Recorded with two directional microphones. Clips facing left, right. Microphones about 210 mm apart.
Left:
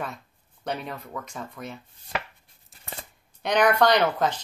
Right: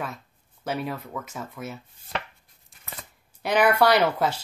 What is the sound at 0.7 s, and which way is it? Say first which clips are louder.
Speech: right 2 dB; 5° right (ahead or behind).